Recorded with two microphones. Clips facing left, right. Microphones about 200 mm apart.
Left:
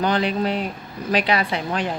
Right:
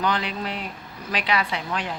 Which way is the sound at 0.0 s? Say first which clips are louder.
Left 6 dB; 35° left (ahead or behind).